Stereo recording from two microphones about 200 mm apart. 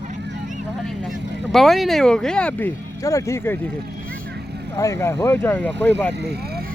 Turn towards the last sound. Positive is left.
turn(degrees=10)  # may be behind; listen again after turning